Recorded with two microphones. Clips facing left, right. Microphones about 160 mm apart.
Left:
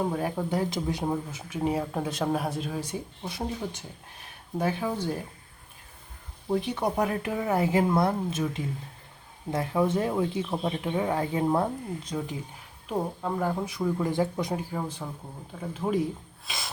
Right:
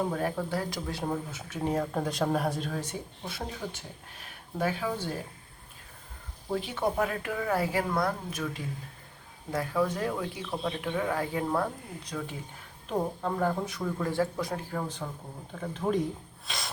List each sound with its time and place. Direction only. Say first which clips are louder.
0.1 s speech: left 2 dB; 10° left (ahead or behind)
6.5 s speech: left 3 dB; 15° left (ahead or behind)
12.9 s speech: left 1 dB; 10° left (ahead or behind)
16.5 s rub: even; centre (ahead or behind)